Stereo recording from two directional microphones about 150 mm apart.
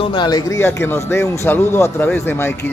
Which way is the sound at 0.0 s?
30° left (ahead or behind).